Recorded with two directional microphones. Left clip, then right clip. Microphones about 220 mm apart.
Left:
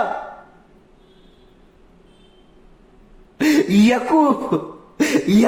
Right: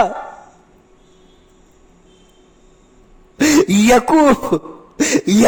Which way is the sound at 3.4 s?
50° right (ahead or behind).